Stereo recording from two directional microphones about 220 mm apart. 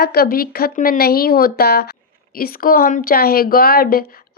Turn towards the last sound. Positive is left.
turn(degrees=45)  # may be behind; listen again after turning